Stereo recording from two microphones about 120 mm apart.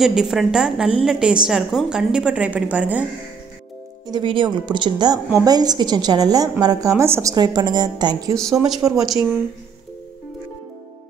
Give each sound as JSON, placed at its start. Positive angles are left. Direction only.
{"t": 0.0, "sound": "a woman's voice", "side_deg": -5}
{"t": 4.1, "sound": "a woman's voice", "side_deg": -45}
{"t": 8.4, "sound": "a woman's voice", "side_deg": 0}